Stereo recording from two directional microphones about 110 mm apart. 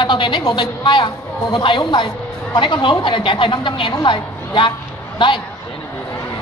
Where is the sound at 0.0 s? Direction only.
45° left (ahead or behind).